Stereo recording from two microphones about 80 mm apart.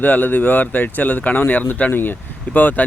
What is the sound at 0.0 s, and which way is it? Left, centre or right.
Speech, left.